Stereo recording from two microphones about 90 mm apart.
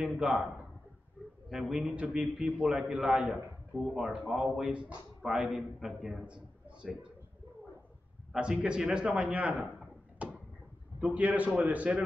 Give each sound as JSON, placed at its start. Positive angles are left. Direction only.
{"t": 0.0, "sound": "a man's voice", "side_deg": -5}
{"t": 1.5, "sound": "a man's voice", "side_deg": -10}
{"t": 6.2, "sound": "a sound", "side_deg": -10}
{"t": 8.3, "sound": "a man's voice", "side_deg": -10}
{"t": 10.2, "sound": "a sound", "side_deg": -15}
{"t": 11.0, "sound": "a man's voice", "side_deg": -15}